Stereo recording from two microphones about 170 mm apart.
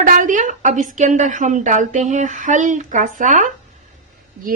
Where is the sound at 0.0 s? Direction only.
50° right (ahead or behind).